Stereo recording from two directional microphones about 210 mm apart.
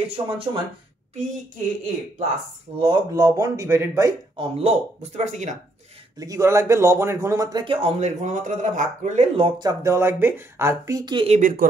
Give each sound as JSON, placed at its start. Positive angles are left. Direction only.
{"t": 0.1, "sound": "speech", "side_deg": -25}
{"t": 2.8, "sound": "speech", "side_deg": -20}
{"t": 4.4, "sound": "speech", "side_deg": -30}
{"t": 6.1, "sound": "speech", "side_deg": -15}
{"t": 9.6, "sound": "speech", "side_deg": -15}